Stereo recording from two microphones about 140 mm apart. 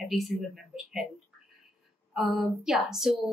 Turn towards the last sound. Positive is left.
turn(degrees=-5)  # may be behind; listen again after turning